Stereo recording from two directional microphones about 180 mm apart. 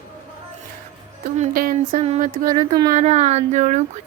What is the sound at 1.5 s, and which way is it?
Speech, 50° right (ahead or behind).